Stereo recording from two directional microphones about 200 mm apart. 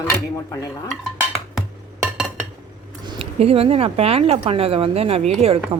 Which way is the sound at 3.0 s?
25° right (ahead or behind).